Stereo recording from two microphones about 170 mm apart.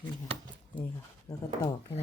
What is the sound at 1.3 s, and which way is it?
Speech, 20° left (ahead or behind).